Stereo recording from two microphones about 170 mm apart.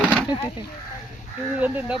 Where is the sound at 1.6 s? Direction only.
10° right (ahead or behind).